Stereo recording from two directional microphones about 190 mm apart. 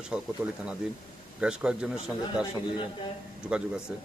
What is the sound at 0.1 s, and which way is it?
Speech, 5° right (ahead or behind).